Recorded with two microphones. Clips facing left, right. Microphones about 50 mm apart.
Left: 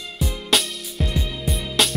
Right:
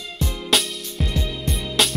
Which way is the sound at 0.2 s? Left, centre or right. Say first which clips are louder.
Even; centre.